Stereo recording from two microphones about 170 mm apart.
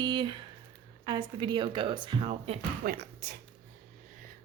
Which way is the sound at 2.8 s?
60° right (ahead or behind).